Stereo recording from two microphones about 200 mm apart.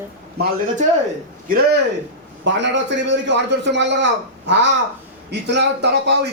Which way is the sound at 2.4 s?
65° right (ahead or behind).